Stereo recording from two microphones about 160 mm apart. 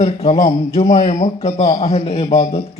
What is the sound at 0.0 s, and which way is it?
A man's voice, 40° left (ahead or behind).